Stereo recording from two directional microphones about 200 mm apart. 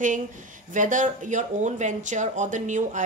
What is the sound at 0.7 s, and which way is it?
Speech, 40° right (ahead or behind).